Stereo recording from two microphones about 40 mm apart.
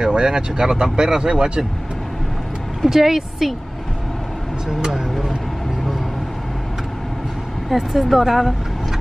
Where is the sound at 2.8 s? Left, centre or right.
Centre.